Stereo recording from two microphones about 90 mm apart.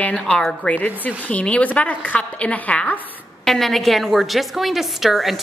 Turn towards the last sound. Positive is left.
turn(degrees=0)  # may be behind; listen again after turning